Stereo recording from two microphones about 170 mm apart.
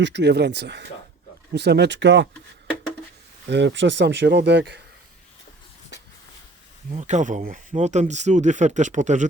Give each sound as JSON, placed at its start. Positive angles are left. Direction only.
{"t": 0.0, "sound": "speech", "side_deg": -90}
{"t": 3.5, "sound": "speech", "side_deg": -90}
{"t": 6.9, "sound": "speech", "side_deg": -45}